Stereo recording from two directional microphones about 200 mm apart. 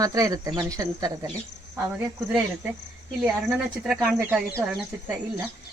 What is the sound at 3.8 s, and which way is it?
Speech, 5° right (ahead or behind).